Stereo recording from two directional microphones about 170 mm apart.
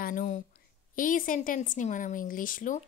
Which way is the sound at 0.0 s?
50° left (ahead or behind).